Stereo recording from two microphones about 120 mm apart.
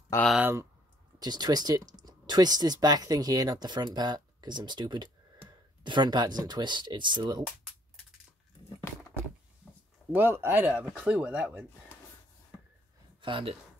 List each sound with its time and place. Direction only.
0.4 s speech: 20° right (ahead or behind)
1.2 s speech: 35° right (ahead or behind)
10.1 s speech: 15° right (ahead or behind)
13.2 s speech: 45° right (ahead or behind)